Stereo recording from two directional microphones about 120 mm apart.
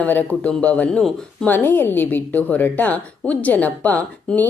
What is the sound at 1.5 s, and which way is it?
Speech, 15° left (ahead or behind).